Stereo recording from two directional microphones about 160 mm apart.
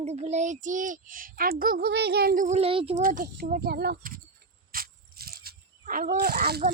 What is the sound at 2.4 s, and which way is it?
Speech, 40° right (ahead or behind).